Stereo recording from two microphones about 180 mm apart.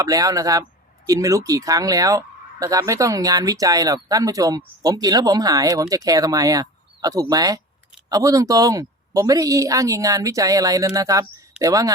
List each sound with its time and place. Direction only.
0.0 s speech: 20° right (ahead or behind)